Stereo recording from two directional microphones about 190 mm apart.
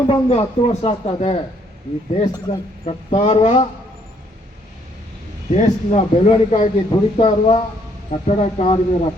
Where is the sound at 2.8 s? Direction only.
35° left (ahead or behind).